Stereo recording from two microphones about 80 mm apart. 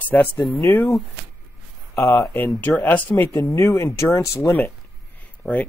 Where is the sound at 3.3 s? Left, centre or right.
Left.